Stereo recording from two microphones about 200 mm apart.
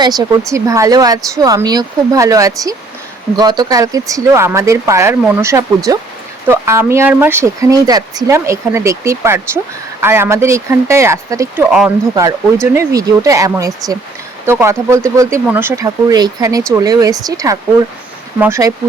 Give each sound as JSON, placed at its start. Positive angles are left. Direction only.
{"t": 0.0, "sound": "speech", "side_deg": -20}